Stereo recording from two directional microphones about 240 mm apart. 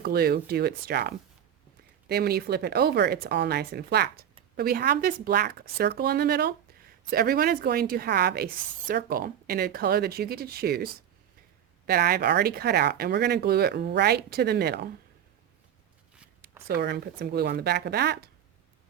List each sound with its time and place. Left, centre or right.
0.0 s a woman's voice: right
16.6 s speech: right